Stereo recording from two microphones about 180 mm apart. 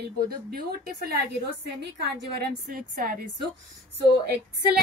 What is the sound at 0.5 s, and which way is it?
A woman's voice, 60° right (ahead or behind).